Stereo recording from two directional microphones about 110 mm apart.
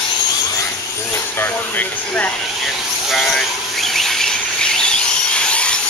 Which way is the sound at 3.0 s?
Centre (ahead or behind).